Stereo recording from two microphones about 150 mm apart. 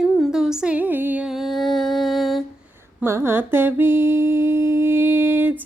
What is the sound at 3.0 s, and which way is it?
Humming, 15° right (ahead or behind).